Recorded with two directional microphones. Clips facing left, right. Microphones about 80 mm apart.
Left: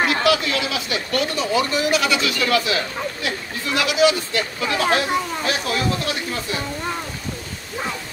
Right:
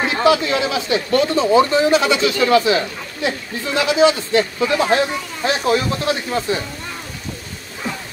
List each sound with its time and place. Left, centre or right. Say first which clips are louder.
0.0 s speech: right 3 dB; right